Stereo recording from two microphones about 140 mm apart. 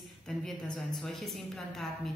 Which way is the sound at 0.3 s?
5° left (ahead or behind).